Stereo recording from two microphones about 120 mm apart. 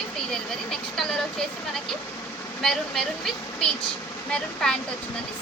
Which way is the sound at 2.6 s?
5° left (ahead or behind).